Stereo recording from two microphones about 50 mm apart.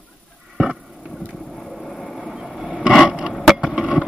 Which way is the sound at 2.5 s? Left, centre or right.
Centre.